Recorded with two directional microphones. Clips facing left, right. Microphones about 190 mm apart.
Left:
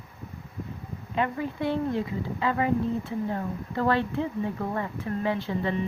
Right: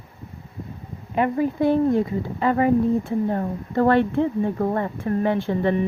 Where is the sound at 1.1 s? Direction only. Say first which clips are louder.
Right 7 dB; 35° right (ahead or behind).